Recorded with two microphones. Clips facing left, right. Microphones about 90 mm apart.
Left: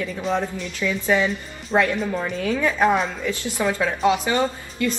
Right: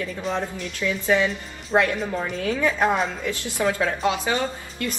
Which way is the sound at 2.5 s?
15° left (ahead or behind).